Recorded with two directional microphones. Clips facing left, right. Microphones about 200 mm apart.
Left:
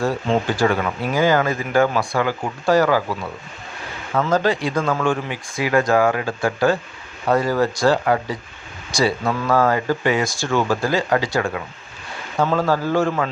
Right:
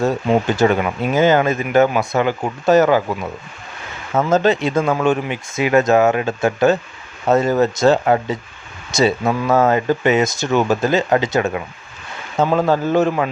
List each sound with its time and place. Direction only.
0.4 s speech: 20° right (ahead or behind)